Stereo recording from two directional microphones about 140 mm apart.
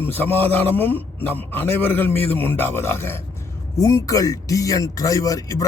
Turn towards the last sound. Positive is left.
turn(degrees=25)  # may be behind; listen again after turning